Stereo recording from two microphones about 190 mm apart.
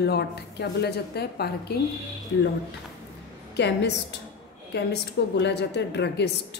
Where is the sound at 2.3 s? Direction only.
70° left (ahead or behind).